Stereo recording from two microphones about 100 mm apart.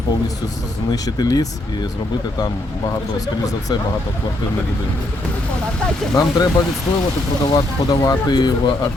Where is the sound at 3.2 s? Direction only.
35° left (ahead or behind).